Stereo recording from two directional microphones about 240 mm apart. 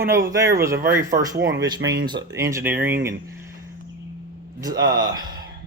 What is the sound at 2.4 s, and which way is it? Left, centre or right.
Speech, centre.